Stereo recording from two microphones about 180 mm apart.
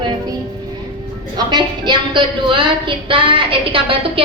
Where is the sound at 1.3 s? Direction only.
25° right (ahead or behind).